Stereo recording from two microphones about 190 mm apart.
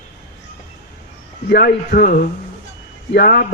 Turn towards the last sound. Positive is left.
turn(degrees=50)  # may be behind; listen again after turning